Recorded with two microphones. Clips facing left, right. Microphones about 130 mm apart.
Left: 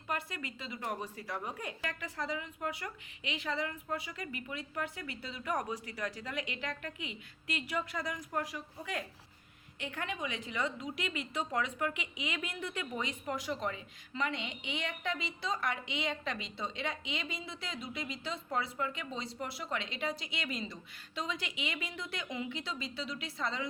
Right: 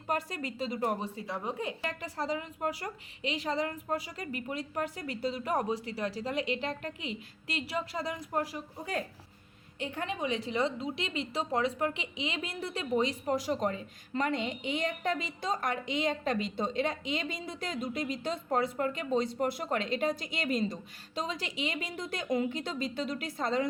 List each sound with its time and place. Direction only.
0.1 s a woman's voice: 40° right (ahead or behind)
1.0 s a woman's voice: 25° right (ahead or behind); by 23.6 s 45° right (ahead or behind)